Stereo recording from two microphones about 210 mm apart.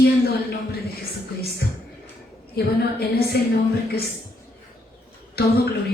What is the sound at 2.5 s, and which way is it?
Speech, 50° left (ahead or behind).